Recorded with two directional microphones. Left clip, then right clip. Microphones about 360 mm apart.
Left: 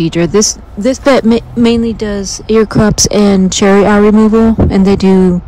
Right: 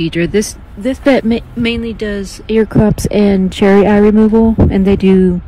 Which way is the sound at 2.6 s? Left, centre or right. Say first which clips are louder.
Left 2 dB; right.